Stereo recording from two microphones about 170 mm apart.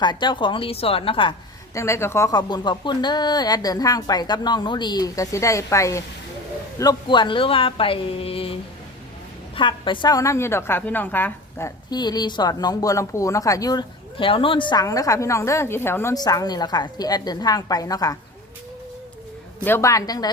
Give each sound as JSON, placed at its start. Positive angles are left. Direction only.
{"t": 0.0, "sound": "a woman's voice", "side_deg": 25}
{"t": 1.7, "sound": "a woman's voice", "side_deg": 15}
{"t": 9.6, "sound": "a woman's voice", "side_deg": 30}
{"t": 19.6, "sound": "a woman's voice", "side_deg": 15}